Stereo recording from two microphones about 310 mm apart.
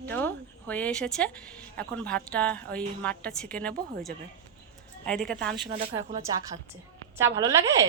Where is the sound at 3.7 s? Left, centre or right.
Right.